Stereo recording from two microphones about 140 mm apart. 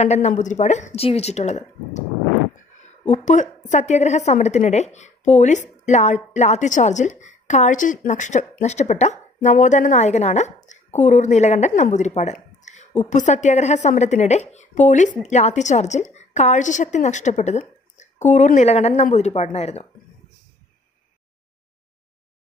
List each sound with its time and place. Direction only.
0.0 s a woman's voice: 55° left (ahead or behind)
3.1 s a woman's voice: 60° left (ahead or behind)